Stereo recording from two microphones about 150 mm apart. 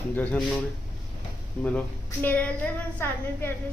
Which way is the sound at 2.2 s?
10° left (ahead or behind).